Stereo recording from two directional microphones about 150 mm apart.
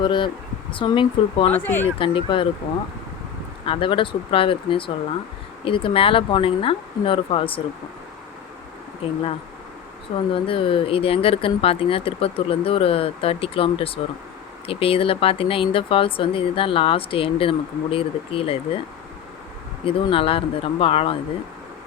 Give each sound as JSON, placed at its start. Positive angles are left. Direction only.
{"t": 0.0, "sound": "speech", "side_deg": 30}
{"t": 1.5, "sound": "speech", "side_deg": 10}
{"t": 2.0, "sound": "speech", "side_deg": 35}
{"t": 3.7, "sound": "speech", "side_deg": 35}
{"t": 9.0, "sound": "speech", "side_deg": 40}
{"t": 10.3, "sound": "speech", "side_deg": 35}
{"t": 19.8, "sound": "speech", "side_deg": 35}